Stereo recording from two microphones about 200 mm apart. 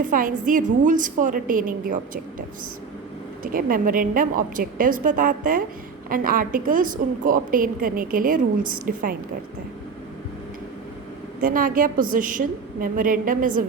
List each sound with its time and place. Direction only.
0.0 s a woman's voice: 40° right (ahead or behind)
3.4 s a woman's voice: 45° right (ahead or behind)
11.3 s a woman's voice: 45° right (ahead or behind)